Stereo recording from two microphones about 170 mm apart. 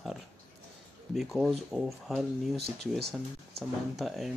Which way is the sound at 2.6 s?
75° right (ahead or behind).